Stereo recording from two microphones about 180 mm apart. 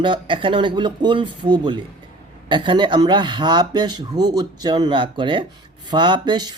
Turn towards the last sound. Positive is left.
turn(degrees=-25)  # may be behind; listen again after turning